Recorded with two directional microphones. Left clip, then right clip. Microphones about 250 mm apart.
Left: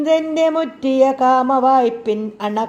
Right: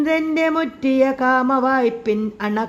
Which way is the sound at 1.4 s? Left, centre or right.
Right.